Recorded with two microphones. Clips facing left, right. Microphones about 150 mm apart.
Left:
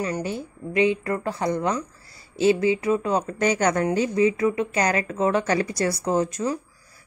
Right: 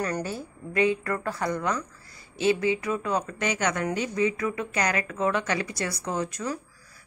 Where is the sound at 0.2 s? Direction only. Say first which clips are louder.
Left 4 dB; 25° left (ahead or behind).